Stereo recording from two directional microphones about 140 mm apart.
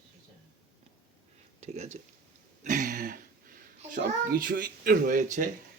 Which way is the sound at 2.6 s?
65° right (ahead or behind).